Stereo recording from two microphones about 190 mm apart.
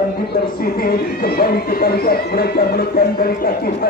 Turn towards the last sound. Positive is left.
turn(degrees=55)  # may be behind; listen again after turning